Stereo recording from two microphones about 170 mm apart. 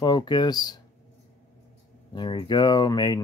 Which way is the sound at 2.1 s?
25° left (ahead or behind).